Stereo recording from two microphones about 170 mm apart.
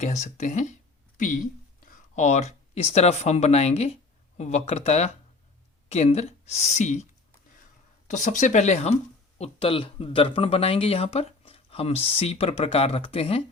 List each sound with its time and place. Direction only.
0.0 s speech: 40° left (ahead or behind)